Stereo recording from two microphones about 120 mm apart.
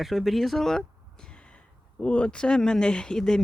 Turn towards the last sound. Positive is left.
turn(degrees=5)  # may be behind; listen again after turning